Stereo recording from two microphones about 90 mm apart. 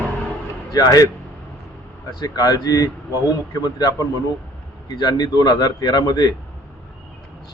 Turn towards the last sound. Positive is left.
turn(degrees=45)  # may be behind; listen again after turning